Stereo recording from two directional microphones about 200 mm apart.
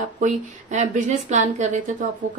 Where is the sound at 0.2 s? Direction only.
40° right (ahead or behind).